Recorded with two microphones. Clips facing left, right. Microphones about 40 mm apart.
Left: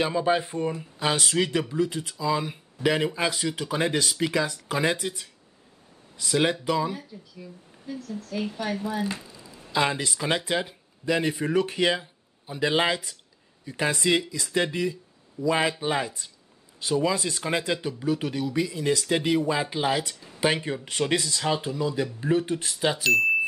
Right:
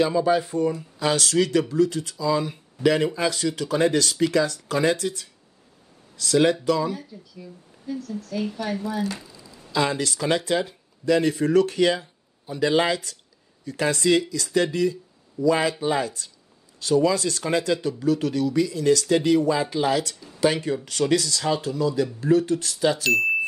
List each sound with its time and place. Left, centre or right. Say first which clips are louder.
0.0 s speech: right 3 dB; left
23.0 s speech: left 4 dB; centre